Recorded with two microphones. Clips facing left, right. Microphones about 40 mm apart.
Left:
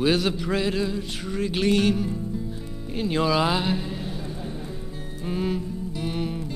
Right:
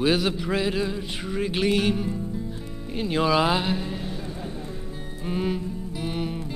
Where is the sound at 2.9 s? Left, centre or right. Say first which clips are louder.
Right 1 dB; centre.